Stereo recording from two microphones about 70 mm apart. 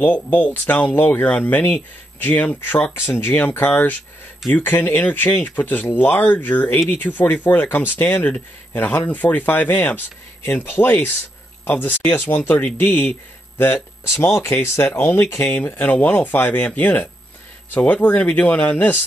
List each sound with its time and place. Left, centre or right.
0.0 s speech: left
14.0 s speech: left